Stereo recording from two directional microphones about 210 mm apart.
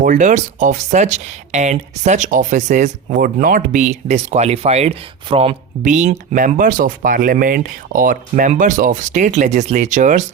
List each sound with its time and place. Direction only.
0.0 s speech: 35° right (ahead or behind)